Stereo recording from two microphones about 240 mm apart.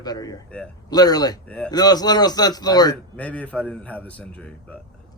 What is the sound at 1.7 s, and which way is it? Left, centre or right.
Speech, centre.